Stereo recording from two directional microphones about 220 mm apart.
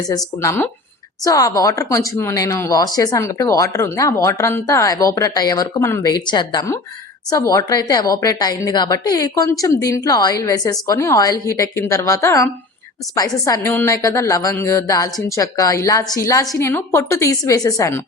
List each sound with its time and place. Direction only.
0.4 s speech: 10° left (ahead or behind)